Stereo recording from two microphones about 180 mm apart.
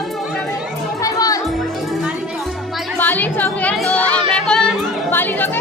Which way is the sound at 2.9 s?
10° left (ahead or behind).